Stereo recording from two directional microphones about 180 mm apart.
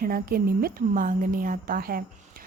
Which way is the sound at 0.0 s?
55° right (ahead or behind).